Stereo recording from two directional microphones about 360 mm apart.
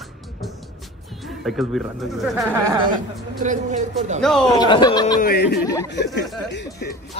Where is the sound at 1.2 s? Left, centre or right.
Centre.